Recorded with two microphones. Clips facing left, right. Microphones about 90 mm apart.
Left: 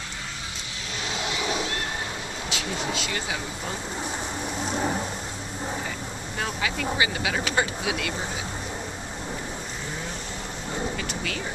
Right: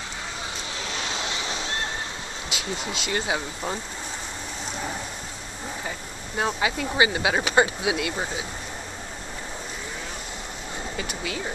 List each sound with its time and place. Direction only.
2.5 s speech: 20° right (ahead or behind)
6.3 s speech: 25° right (ahead or behind)
11.0 s a sound: 15° right (ahead or behind)